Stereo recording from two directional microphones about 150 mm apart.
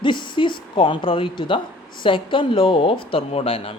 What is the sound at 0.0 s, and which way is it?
A woman's voice, 35° left (ahead or behind).